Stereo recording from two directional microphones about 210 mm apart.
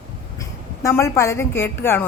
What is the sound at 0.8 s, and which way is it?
A woman's voice, 15° left (ahead or behind).